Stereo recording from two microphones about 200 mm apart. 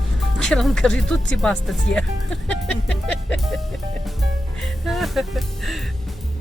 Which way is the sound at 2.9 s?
5° left (ahead or behind).